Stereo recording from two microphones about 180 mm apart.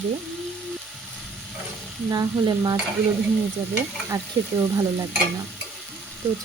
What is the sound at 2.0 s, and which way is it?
Speech, 20° right (ahead or behind).